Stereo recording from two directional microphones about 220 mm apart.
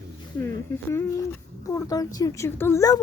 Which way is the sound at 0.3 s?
10° left (ahead or behind).